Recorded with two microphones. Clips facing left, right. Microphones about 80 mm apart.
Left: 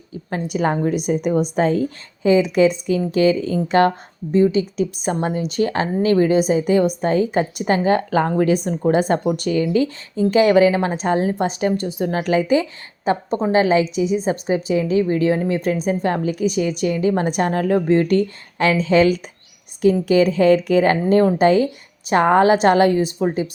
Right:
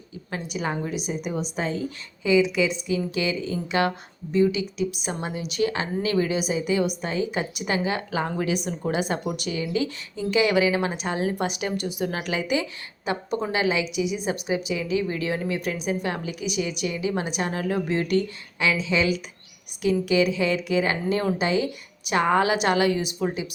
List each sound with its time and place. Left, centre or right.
0.3 s a woman's voice: left